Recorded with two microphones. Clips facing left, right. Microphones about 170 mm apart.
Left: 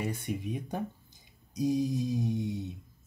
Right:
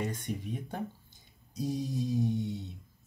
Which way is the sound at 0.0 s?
10° left (ahead or behind).